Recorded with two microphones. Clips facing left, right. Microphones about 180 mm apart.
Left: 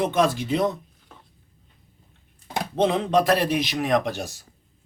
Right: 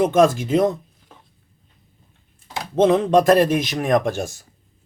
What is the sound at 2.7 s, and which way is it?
Speech, 45° right (ahead or behind).